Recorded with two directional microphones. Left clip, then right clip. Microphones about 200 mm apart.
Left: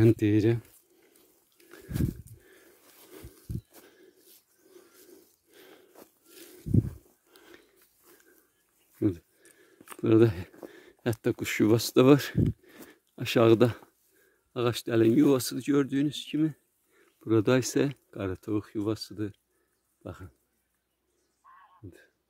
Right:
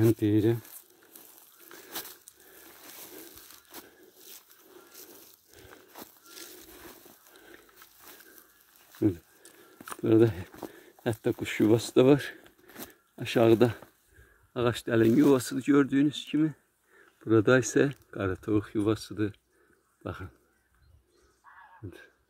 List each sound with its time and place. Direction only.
0.0 s speech: 55° left (ahead or behind)
5.9 s battle cry: 50° right (ahead or behind)
7.3 s pig: 50° left (ahead or behind)
10.0 s speech: 55° left (ahead or behind)
14.5 s speech: 40° left (ahead or behind); by 20.3 s 10° left (ahead or behind)
21.5 s a sound: 10° left (ahead or behind)